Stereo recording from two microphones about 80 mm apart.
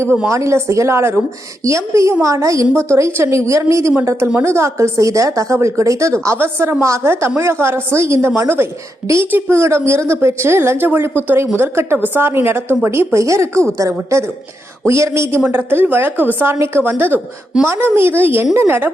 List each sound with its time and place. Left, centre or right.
0.3 s a woman's voice: right
6.2 s a woman's voice: right
14.8 s a woman's voice: right